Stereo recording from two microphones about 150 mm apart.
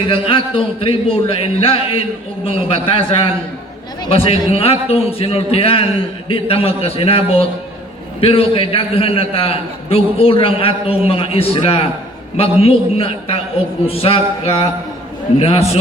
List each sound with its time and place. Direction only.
0.1 s a man's voice: 35° left (ahead or behind)